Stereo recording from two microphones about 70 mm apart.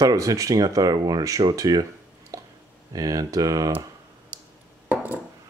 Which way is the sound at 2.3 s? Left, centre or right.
Right.